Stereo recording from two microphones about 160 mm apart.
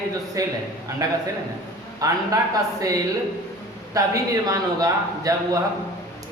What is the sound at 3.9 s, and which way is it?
A man's voice, 20° right (ahead or behind).